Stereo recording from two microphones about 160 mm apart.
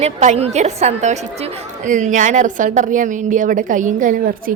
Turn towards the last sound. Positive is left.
turn(degrees=-55)  # may be behind; listen again after turning